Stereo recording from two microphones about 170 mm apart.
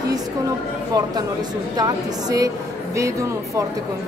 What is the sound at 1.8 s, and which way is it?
A woman's voice, 20° right (ahead or behind).